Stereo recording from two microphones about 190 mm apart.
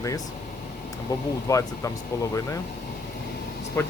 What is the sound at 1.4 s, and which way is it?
Speech, 15° left (ahead or behind).